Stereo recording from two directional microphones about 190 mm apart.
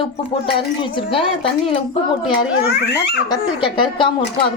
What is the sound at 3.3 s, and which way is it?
Speech, 25° left (ahead or behind).